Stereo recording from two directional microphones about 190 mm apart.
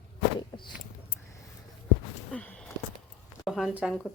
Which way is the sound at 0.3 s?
25° left (ahead or behind).